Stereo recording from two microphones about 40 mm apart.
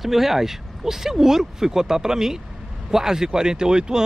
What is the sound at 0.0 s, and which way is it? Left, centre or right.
Speech, centre.